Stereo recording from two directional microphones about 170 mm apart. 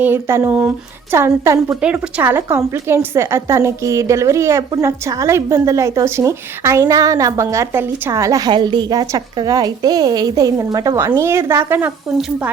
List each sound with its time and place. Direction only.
0.0 s a woman's voice: 15° right (ahead or behind)